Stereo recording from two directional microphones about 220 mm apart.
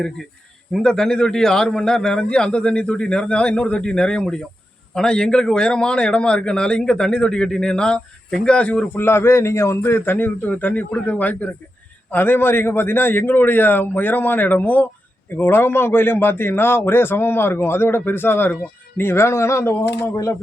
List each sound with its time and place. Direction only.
0.7 s a man's voice: centre (ahead or behind)